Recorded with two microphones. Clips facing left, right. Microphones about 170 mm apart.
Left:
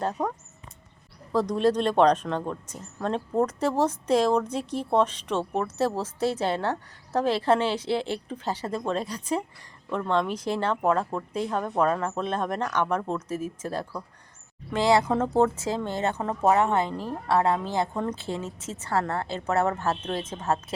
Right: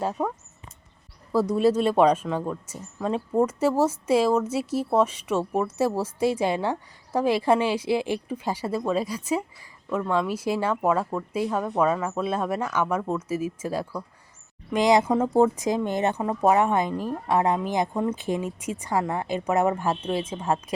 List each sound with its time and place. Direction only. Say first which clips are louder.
0.0 s speech: right 1 dB; 5° right (ahead or behind)